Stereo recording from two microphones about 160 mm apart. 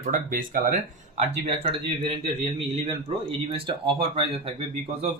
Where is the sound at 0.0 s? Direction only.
55° right (ahead or behind); by 4.5 s 35° right (ahead or behind).